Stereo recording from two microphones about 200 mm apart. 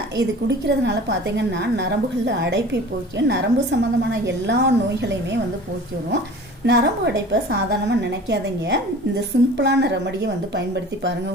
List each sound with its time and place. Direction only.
0.2 s a woman's voice: 60° right (ahead or behind)
6.7 s a woman's voice: 60° right (ahead or behind)